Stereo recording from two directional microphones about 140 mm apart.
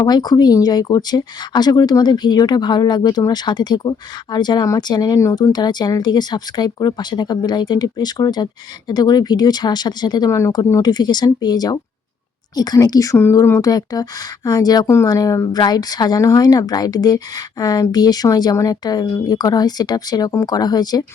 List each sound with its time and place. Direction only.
0.0 s speech: 30° left (ahead or behind)